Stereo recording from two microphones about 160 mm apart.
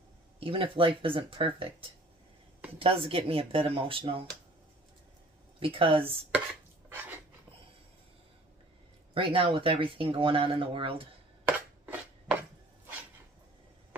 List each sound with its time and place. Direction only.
0.4 s speech: 35° right (ahead or behind)
5.6 s speech: 35° right (ahead or behind)
9.1 s speech: 35° right (ahead or behind)
11.4 s a sound: 10° right (ahead or behind)